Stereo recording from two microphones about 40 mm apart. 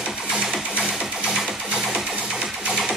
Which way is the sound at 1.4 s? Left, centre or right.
Centre.